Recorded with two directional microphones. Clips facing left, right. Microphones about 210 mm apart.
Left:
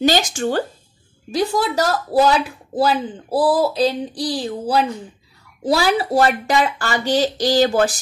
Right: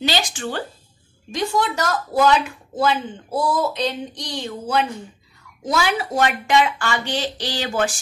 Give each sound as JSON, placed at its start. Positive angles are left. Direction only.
{"t": 0.0, "sound": "speech", "side_deg": 45}